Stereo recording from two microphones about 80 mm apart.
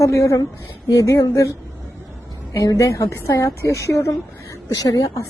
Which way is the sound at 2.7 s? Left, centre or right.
Left.